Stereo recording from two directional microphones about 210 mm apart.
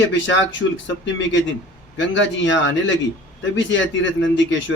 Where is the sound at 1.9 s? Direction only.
60° left (ahead or behind).